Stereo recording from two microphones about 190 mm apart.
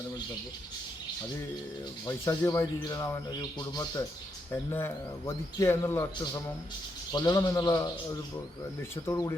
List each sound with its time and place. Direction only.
2.0 s a man's voice: 15° left (ahead or behind)
9.0 s speech: 15° left (ahead or behind)